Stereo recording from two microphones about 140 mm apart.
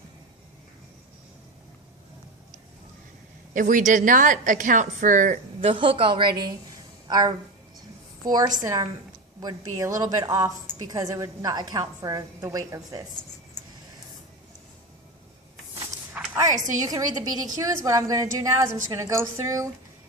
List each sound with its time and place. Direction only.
3.5 s a woman's voice: 70° right (ahead or behind)
5.5 s a woman's voice: 40° right (ahead or behind); by 13.1 s 25° right (ahead or behind)
16.2 s a sound: 10° right (ahead or behind)
16.6 s a woman's voice: 60° right (ahead or behind)
16.8 s a woman's voice: 25° right (ahead or behind)